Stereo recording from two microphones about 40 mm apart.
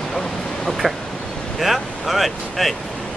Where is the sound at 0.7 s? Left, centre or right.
Centre.